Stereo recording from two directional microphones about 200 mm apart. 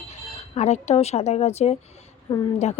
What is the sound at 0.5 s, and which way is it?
Speech, 35° left (ahead or behind).